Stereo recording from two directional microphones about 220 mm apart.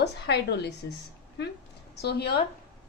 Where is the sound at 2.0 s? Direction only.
45° left (ahead or behind).